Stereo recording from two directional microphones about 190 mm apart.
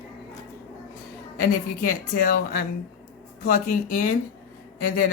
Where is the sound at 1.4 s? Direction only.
50° left (ahead or behind).